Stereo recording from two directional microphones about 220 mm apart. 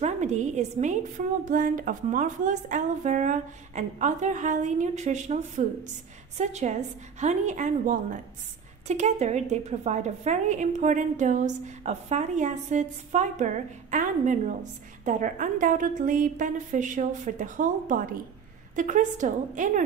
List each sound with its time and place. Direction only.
0.0 s a woman's voice: 30° right (ahead or behind)